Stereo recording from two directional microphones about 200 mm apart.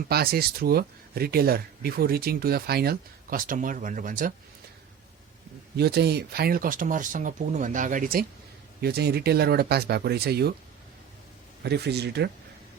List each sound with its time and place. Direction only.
0.1 s speech: 50° right (ahead or behind)
5.7 s speech: 55° right (ahead or behind)
11.6 s speech: 55° right (ahead or behind)